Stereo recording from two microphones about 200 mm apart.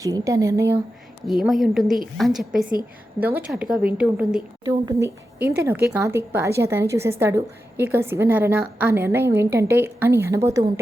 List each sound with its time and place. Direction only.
0.0 s speech: 15° right (ahead or behind)
1.3 s a woman's voice: centre (ahead or behind)
4.6 s speech: 15° right (ahead or behind)